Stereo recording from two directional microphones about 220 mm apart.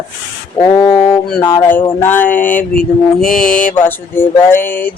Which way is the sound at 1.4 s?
15° left (ahead or behind).